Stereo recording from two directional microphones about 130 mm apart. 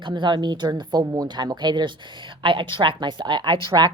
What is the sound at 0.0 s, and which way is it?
A woman's voice, 35° right (ahead or behind).